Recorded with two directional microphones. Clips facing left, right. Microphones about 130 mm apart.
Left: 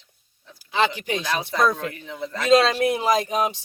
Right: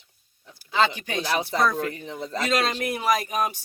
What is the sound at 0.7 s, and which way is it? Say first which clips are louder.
Speech: left 1 dB; 20° left (ahead or behind).